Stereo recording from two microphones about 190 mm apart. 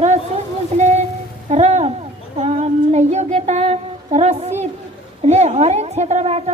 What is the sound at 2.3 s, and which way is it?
Child singing, 35° right (ahead or behind).